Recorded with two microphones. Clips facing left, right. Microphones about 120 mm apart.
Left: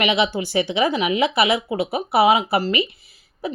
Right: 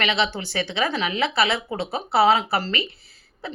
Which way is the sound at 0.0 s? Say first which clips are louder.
Left 4 dB; 15° left (ahead or behind).